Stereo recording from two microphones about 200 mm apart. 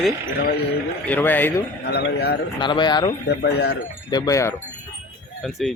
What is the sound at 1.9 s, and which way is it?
Speech, 55° left (ahead or behind).